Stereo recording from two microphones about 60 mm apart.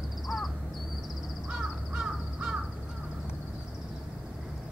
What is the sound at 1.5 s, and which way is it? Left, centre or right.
Crow, centre.